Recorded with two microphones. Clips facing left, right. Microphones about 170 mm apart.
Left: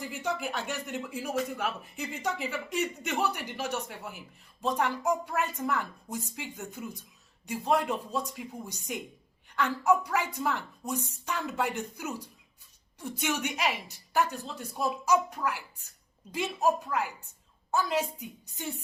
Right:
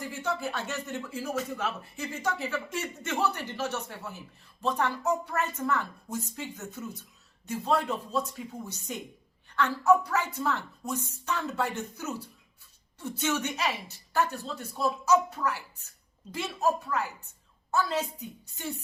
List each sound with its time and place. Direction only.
0.0 s speech: 15° left (ahead or behind)